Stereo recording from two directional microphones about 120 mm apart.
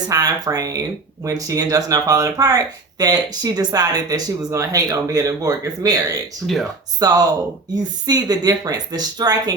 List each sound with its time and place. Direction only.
0.1 s speech: 35° right (ahead or behind)